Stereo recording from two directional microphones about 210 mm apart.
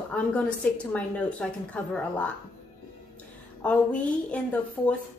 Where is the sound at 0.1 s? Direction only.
5° left (ahead or behind).